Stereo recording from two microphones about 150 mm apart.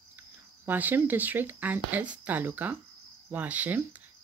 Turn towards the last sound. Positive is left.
turn(degrees=-10)  # may be behind; listen again after turning